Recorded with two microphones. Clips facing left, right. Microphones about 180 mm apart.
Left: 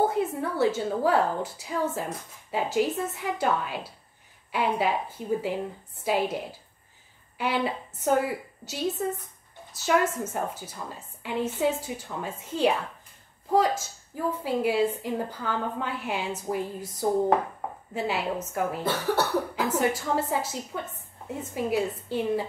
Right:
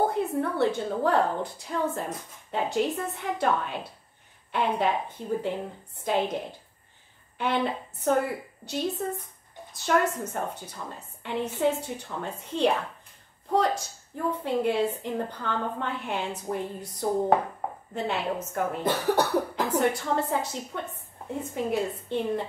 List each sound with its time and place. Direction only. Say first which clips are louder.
0.0 s a woman's voice: even; centre (ahead or behind)
7.3 s a woman's voice: even; 5° left (ahead or behind)
17.9 s a woman's voice: left 1 dB; 5° left (ahead or behind)
18.8 s speech: right 3 dB; 15° right (ahead or behind)
19.5 s a woman's voice: right 1 dB; 5° left (ahead or behind)